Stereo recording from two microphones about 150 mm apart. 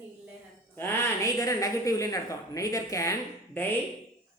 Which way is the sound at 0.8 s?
20° left (ahead or behind).